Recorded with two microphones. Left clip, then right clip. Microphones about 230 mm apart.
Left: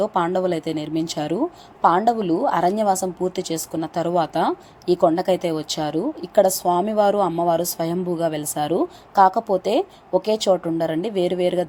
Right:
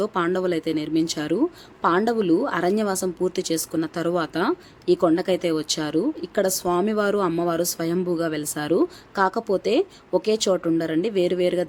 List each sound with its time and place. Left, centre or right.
0.0 s speech: centre